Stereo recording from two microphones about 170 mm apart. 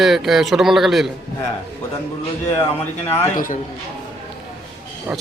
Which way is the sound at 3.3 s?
55° left (ahead or behind).